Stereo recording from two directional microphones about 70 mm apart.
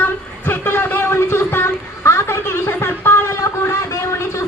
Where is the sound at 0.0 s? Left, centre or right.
Left.